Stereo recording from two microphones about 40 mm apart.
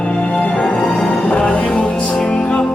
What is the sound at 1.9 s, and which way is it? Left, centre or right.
Music, centre.